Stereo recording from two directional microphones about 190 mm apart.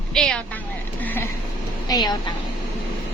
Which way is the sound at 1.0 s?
10° left (ahead or behind).